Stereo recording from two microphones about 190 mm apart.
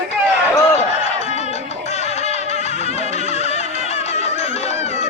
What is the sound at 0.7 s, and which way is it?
Music, 35° left (ahead or behind).